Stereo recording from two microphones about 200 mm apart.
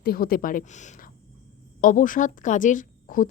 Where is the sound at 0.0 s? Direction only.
50° left (ahead or behind).